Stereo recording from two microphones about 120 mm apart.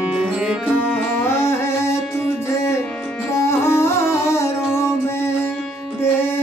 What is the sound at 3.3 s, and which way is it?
Music, 25° left (ahead or behind).